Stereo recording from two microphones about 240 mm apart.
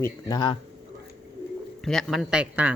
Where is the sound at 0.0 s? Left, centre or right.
Centre.